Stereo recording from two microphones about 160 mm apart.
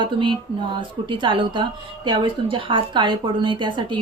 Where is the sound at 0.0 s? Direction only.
30° right (ahead or behind).